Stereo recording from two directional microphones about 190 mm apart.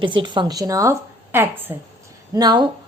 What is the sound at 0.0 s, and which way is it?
A woman's voice, 25° right (ahead or behind).